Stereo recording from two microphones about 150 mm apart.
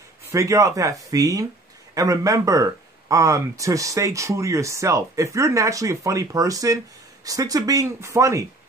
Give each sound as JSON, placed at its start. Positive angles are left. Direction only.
{"t": 0.3, "sound": "speech", "side_deg": -20}